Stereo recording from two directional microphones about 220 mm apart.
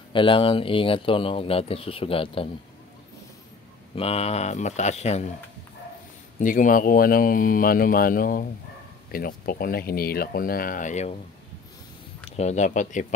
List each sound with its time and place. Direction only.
0.1 s speech: 25° left (ahead or behind)
3.9 s speech: 25° left (ahead or behind)
6.4 s speech: 40° left (ahead or behind)
12.3 s speech: 30° left (ahead or behind)